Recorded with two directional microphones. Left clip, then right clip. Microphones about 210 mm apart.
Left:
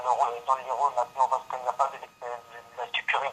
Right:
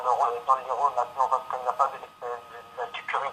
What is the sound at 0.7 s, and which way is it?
Speech, 20° left (ahead or behind).